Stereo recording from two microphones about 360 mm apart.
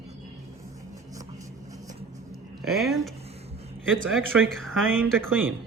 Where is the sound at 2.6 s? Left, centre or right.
Centre.